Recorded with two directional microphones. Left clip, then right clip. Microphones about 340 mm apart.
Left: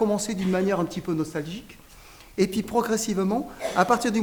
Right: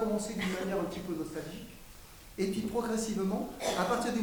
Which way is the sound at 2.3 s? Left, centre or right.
Left.